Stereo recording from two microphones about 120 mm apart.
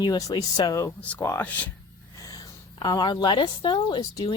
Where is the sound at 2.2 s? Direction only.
35° left (ahead or behind).